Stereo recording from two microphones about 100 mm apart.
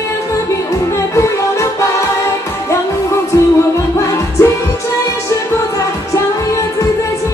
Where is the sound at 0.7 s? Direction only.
30° left (ahead or behind).